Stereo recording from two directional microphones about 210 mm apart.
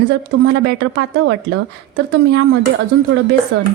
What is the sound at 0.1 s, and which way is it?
A woman's voice, 60° right (ahead or behind).